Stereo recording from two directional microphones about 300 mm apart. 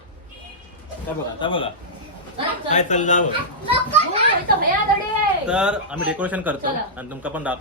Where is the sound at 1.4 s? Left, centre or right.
Centre.